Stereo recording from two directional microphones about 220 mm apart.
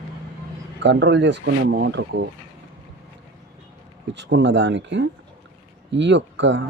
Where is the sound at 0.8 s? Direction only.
55° right (ahead or behind).